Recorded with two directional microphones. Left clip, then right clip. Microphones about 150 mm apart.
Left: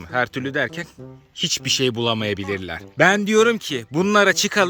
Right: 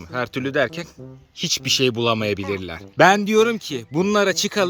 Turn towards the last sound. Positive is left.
turn(degrees=5)  # may be behind; listen again after turning